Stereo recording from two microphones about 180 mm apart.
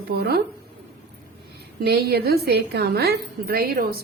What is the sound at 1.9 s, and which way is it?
A woman's voice, 60° right (ahead or behind).